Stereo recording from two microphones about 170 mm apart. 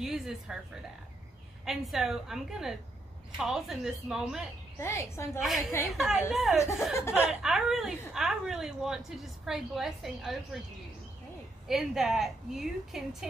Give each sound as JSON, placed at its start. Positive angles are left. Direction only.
{"t": 0.0, "sound": "speech", "side_deg": 0}
{"t": 1.7, "sound": "a woman's voice", "side_deg": 0}
{"t": 4.7, "sound": "a woman's voice", "side_deg": 15}
{"t": 5.9, "sound": "a woman's voice", "side_deg": 0}
{"t": 6.9, "sound": "a woman's voice", "side_deg": 15}
{"t": 7.2, "sound": "a woman's voice", "side_deg": -5}
{"t": 11.6, "sound": "a woman's voice", "side_deg": 0}